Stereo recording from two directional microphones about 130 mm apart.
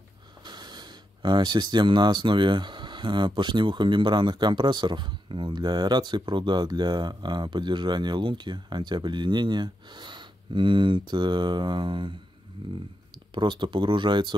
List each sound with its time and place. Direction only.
0.5 s speech: 35° right (ahead or behind)
13.3 s speech: 35° right (ahead or behind)